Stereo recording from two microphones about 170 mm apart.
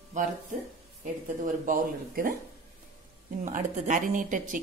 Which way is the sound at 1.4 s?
55° right (ahead or behind).